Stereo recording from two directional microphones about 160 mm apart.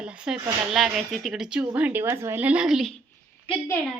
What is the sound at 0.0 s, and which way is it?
Speech, 5° right (ahead or behind).